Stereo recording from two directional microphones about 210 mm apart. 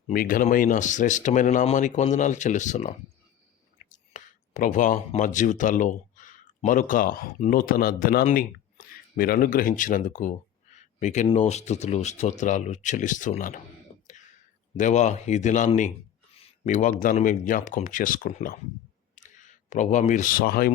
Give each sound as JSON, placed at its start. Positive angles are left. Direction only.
{"t": 0.1, "sound": "speech", "side_deg": 40}
{"t": 13.9, "sound": "a sound", "side_deg": 30}
{"t": 14.8, "sound": "speech", "side_deg": 35}